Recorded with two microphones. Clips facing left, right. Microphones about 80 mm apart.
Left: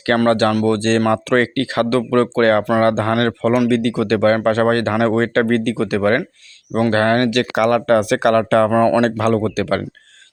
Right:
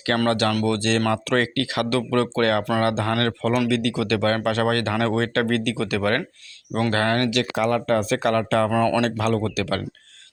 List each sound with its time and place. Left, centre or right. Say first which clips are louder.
0.3 s speech: left 6 dB; left
7.5 s speech: left 8 dB; left
8.7 s speech: left 6 dB; left